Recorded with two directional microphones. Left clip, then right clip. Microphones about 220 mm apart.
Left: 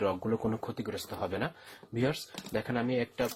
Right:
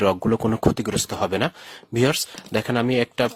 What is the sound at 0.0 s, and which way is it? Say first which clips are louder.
Speech: right 11 dB; 45° right (ahead or behind).